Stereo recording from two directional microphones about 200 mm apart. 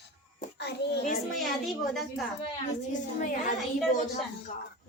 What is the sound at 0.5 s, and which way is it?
Speech, 55° left (ahead or behind).